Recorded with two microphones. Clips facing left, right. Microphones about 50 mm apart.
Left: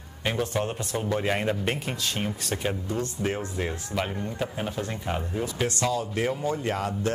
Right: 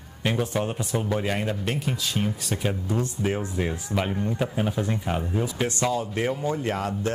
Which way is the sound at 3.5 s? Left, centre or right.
Centre.